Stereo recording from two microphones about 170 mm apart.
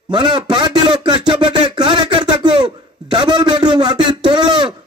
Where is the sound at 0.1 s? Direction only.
25° right (ahead or behind).